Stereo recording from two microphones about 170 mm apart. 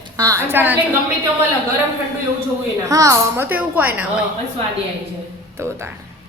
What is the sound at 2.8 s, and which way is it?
A woman's voice, 20° right (ahead or behind).